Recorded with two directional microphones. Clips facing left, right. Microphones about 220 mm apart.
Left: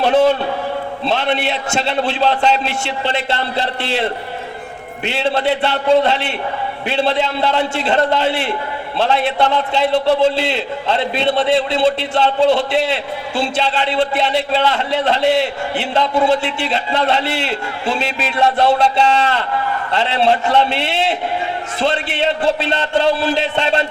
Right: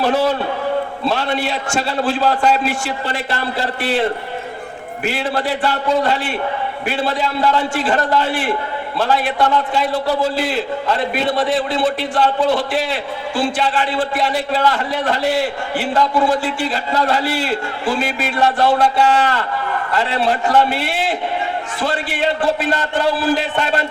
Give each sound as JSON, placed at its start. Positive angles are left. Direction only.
{"t": 0.1, "sound": "a man's voice", "side_deg": 25}
{"t": 5.0, "sound": "a man's voice", "side_deg": 25}